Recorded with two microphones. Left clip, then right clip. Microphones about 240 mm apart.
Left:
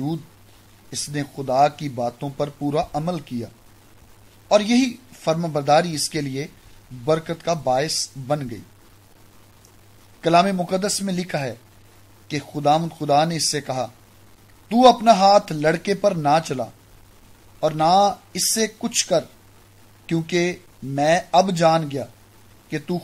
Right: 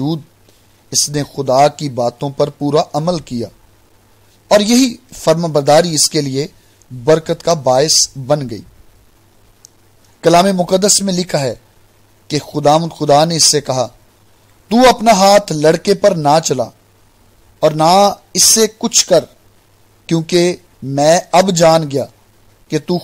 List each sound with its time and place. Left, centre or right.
0.8 s speech: right
4.6 s speech: right
10.2 s speech: right